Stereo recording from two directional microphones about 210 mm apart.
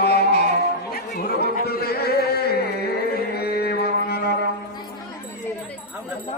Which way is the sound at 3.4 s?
50° left (ahead or behind).